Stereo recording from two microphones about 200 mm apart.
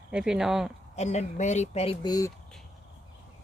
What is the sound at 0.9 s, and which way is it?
Speech, 35° left (ahead or behind).